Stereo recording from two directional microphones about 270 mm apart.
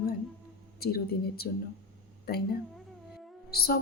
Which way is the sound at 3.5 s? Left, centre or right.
Left.